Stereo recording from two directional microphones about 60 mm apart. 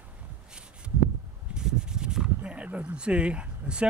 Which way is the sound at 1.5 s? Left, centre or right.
Centre.